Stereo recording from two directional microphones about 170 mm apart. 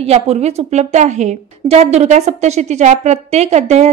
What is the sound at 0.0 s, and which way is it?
A woman's voice, 40° right (ahead or behind).